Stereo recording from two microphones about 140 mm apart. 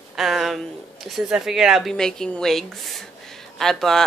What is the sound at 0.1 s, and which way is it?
Speech, centre (ahead or behind).